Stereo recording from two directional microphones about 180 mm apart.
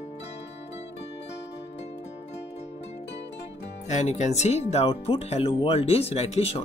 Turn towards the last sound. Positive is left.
turn(degrees=35)  # may be behind; listen again after turning